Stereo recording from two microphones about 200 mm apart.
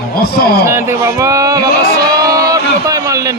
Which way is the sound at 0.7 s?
15° right (ahead or behind).